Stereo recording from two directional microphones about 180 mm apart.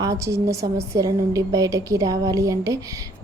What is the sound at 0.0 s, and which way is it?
A woman's voice, 15° right (ahead or behind).